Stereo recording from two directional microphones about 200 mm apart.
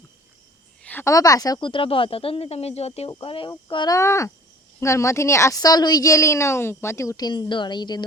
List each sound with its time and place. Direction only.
0.8 s a woman's voice: 10° left (ahead or behind)